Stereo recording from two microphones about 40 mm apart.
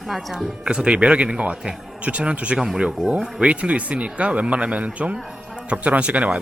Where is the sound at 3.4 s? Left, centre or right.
Right.